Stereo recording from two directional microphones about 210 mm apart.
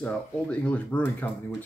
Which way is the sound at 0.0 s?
5° left (ahead or behind).